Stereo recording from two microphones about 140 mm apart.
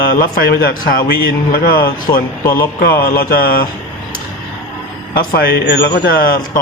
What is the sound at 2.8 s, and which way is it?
Speech, 90° left.